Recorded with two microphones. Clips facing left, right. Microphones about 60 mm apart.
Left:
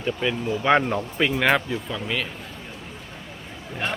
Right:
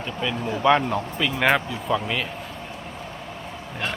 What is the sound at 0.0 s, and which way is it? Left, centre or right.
Speech, centre.